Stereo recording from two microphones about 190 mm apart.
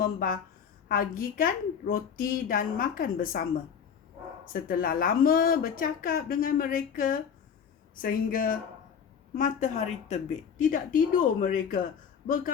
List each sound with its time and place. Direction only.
0.0 s a woman's voice: 45° left (ahead or behind)
4.4 s a woman's voice: 50° left (ahead or behind)